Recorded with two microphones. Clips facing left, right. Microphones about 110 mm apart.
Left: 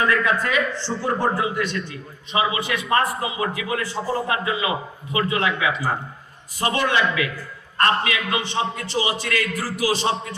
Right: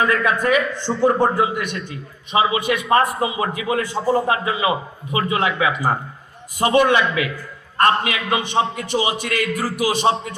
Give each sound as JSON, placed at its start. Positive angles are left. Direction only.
{"t": 0.1, "sound": "a man's voice", "side_deg": -20}